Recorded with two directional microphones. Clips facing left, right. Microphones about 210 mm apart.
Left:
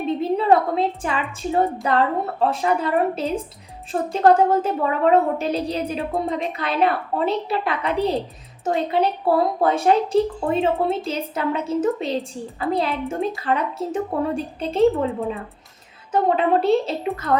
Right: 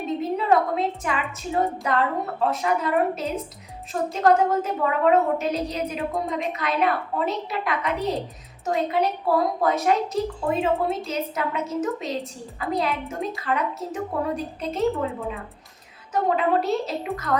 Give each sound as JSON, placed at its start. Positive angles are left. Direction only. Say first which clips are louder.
{"t": 0.2, "sound": "a woman's voice", "louder": "left 3 dB", "side_deg": 30}